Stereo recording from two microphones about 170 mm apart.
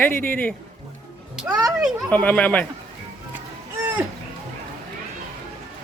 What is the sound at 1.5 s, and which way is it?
Speech, 20° right (ahead or behind).